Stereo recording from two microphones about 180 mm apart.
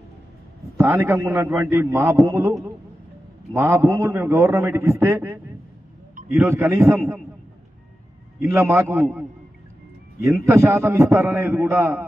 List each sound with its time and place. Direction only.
0.7 s a man's voice: 15° right (ahead or behind)
3.5 s a man's voice: 15° right (ahead or behind)
8.5 s a man's voice: 15° right (ahead or behind)
10.5 s a man's voice: 15° right (ahead or behind)